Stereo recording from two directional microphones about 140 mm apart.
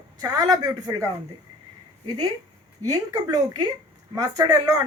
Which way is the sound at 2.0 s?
30° right (ahead or behind).